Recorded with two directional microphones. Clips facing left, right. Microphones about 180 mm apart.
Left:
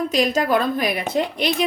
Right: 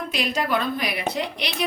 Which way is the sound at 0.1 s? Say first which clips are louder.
Left 4 dB; 45° left (ahead or behind).